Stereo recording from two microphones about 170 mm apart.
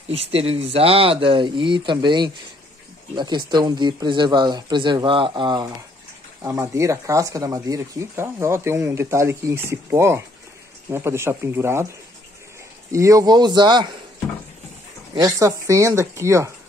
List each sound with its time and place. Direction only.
0.1 s speech: 35° right (ahead or behind); by 11.9 s 15° right (ahead or behind)
12.9 s speech: 20° right (ahead or behind)
15.1 s speech: 20° right (ahead or behind)